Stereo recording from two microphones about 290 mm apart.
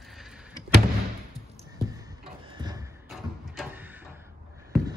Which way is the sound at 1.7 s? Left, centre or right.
Centre.